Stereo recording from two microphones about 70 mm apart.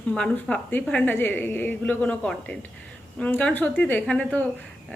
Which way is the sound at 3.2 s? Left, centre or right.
Centre.